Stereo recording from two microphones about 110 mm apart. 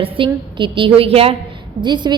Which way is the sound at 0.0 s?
50° right (ahead or behind).